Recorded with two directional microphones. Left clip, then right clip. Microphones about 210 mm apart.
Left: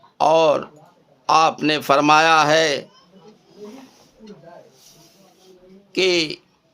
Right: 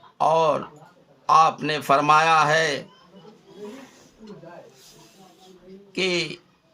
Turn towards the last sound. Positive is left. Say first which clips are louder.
# left 6 dB
turn(degrees=50)  # may be behind; listen again after turning